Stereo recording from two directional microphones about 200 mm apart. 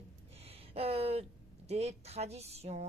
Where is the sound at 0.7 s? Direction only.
30° right (ahead or behind).